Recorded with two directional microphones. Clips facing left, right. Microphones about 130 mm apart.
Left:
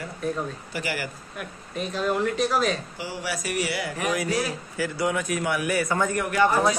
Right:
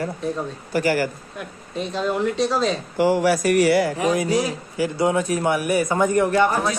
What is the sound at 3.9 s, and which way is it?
A man's voice, 25° right (ahead or behind).